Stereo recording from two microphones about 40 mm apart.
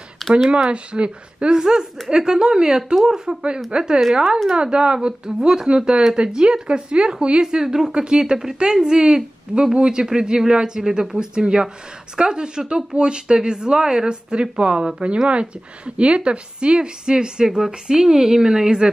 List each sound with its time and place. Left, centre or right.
0.5 s speech: right
1.6 s a woman's voice: centre